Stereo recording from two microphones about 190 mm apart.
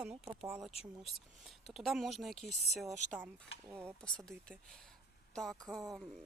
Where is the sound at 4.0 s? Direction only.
5° left (ahead or behind).